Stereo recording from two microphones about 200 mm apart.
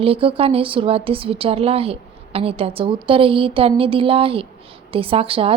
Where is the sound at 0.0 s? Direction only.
30° right (ahead or behind).